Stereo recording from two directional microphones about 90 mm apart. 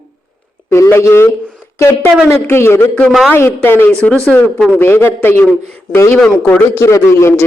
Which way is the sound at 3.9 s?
15° left (ahead or behind).